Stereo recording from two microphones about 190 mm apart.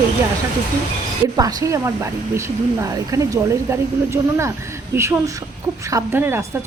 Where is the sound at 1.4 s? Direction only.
20° right (ahead or behind).